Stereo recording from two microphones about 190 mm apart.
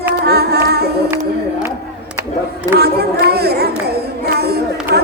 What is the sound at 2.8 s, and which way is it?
Chatter, 55° right (ahead or behind).